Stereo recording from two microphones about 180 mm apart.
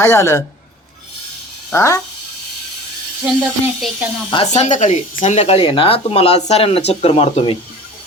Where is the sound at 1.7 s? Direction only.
15° left (ahead or behind).